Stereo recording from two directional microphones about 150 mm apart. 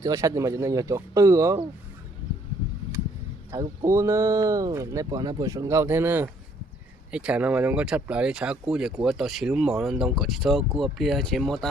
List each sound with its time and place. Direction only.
0.0 s speech: 20° right (ahead or behind)
3.5 s speech: 20° right (ahead or behind); by 11.7 s 5° left (ahead or behind)